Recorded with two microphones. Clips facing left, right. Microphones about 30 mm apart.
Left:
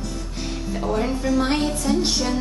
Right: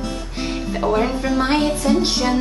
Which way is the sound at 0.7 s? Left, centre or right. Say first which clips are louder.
Right 4 dB; right.